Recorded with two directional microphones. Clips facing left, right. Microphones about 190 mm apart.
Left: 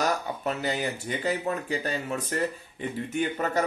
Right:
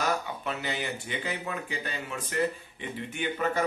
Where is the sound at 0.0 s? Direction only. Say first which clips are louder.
Left 3 dB; 40° left (ahead or behind).